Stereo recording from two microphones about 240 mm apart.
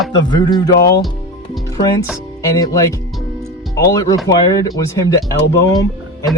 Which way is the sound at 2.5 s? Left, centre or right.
Centre.